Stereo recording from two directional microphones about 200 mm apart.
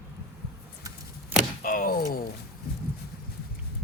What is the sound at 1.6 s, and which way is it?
Thunk, 45° left (ahead or behind).